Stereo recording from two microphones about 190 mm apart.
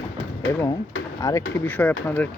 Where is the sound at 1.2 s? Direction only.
15° left (ahead or behind).